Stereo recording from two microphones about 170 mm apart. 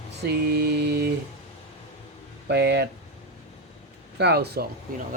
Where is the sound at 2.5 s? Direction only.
80° right.